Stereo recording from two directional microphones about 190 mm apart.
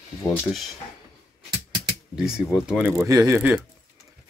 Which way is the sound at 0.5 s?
Centre (ahead or behind).